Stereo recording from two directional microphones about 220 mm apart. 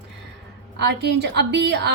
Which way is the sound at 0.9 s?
50° right (ahead or behind).